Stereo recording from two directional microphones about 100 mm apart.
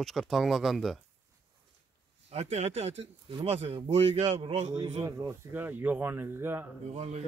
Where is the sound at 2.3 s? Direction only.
90° right.